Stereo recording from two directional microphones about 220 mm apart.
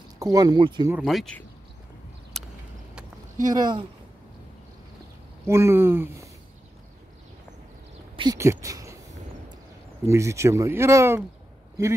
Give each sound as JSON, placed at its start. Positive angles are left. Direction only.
{"t": 0.2, "sound": "speech", "side_deg": -15}
{"t": 0.9, "sound": "speech", "side_deg": 0}
{"t": 2.3, "sound": "a sound", "side_deg": 0}
{"t": 3.5, "sound": "speech", "side_deg": -20}
{"t": 5.5, "sound": "speech", "side_deg": -10}
{"t": 8.2, "sound": "speech", "side_deg": -15}
{"t": 10.0, "sound": "speech", "side_deg": -15}